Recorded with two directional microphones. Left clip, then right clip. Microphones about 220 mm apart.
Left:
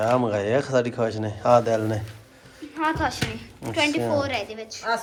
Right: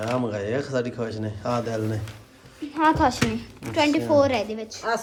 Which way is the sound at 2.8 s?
45° right (ahead or behind).